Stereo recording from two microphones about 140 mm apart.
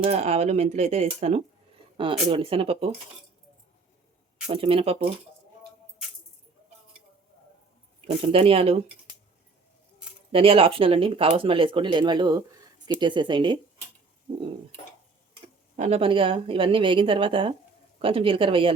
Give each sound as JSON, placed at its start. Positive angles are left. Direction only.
{"t": 0.0, "sound": "speech", "side_deg": -50}
{"t": 4.4, "sound": "speech", "side_deg": -40}
{"t": 8.0, "sound": "speech", "side_deg": -40}
{"t": 10.3, "sound": "speech", "side_deg": -40}
{"t": 14.3, "sound": "a sound", "side_deg": -45}
{"t": 15.7, "sound": "speech", "side_deg": -60}
{"t": 16.0, "sound": "speech", "side_deg": -40}